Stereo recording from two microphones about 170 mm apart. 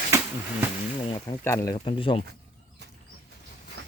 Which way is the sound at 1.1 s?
30° left (ahead or behind).